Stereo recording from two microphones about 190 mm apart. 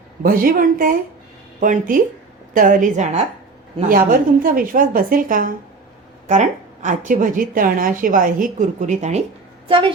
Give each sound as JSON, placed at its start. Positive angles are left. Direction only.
{"t": 0.2, "sound": "a woman's voice", "side_deg": -50}
{"t": 9.6, "sound": "a woman's voice", "side_deg": -25}